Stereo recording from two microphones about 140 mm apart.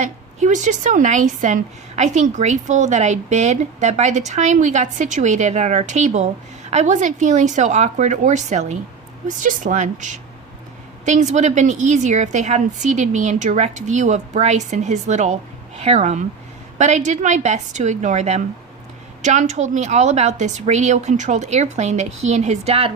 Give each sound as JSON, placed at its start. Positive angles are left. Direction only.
{"t": 0.0, "sound": "a woman's voice", "side_deg": -60}
{"t": 9.2, "sound": "a woman's voice", "side_deg": -65}